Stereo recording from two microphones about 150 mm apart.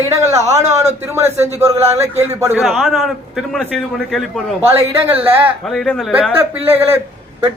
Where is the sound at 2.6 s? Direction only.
Centre (ahead or behind).